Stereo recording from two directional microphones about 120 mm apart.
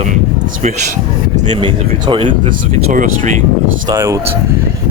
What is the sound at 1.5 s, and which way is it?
Speech, 45° right (ahead or behind).